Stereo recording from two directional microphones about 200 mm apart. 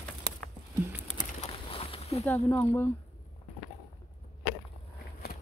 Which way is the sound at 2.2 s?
10° left (ahead or behind).